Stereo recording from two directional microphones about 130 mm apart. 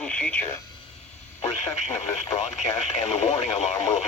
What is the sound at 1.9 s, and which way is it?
Speech, 60° left (ahead or behind).